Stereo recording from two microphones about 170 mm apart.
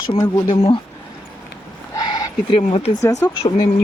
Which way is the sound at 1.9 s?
20° left (ahead or behind).